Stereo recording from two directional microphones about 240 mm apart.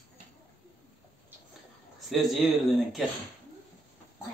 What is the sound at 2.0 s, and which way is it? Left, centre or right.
Speech, centre.